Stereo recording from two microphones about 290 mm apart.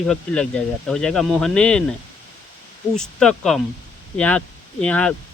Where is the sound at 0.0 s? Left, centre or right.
Centre.